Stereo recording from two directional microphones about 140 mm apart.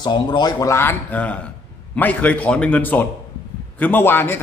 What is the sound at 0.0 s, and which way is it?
A man's voice, 35° left (ahead or behind).